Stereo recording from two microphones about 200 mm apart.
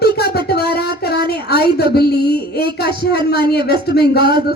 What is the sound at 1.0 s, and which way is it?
Speech, 50° left (ahead or behind).